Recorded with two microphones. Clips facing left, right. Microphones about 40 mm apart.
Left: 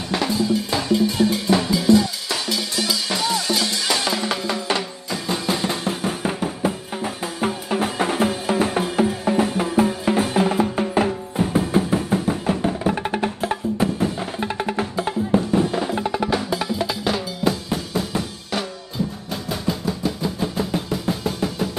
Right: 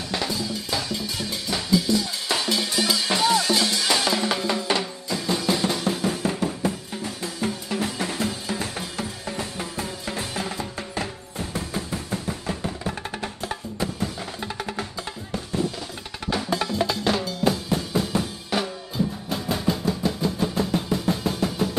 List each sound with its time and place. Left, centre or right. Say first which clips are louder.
0.1 s music: left 8 dB; centre
2.9 s music: right 2 dB; right
3.3 s music: even; centre; by 16.1 s left
16.2 s drum: right 2 dB; centre
19.0 s music: even; centre